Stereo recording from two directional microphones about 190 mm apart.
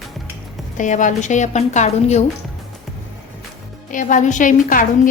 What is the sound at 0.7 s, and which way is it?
A woman's voice, 40° left (ahead or behind).